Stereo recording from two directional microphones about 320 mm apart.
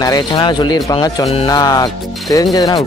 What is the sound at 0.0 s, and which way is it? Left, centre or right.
Speech, centre.